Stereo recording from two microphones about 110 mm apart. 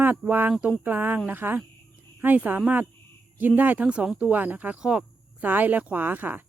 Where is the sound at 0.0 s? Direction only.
15° right (ahead or behind).